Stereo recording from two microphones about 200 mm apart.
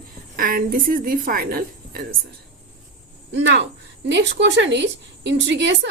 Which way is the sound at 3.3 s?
60° right (ahead or behind).